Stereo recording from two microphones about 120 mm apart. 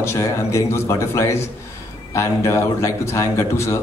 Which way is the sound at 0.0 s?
25° left (ahead or behind).